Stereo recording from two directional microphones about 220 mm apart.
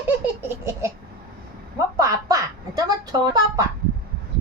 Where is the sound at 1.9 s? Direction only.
15° right (ahead or behind).